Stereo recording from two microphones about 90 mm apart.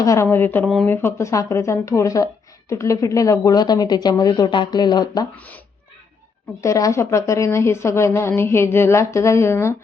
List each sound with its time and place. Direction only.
0.0 s speech: 35° left (ahead or behind); by 5.2 s 50° left (ahead or behind)
6.6 s speech: 40° left (ahead or behind)